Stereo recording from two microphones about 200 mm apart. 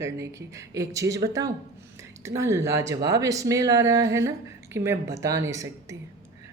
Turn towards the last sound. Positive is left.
turn(degrees=-15)  # may be behind; listen again after turning